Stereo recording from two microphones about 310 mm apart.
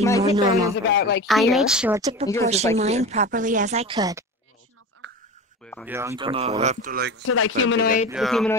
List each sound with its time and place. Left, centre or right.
0.2 s a man's voice: centre
0.8 s speech: left
1.2 s speech: centre
5.0 s a sound: right
5.9 s speech: centre; by 7.2 s right
7.2 s speech: left
8.1 s speech: centre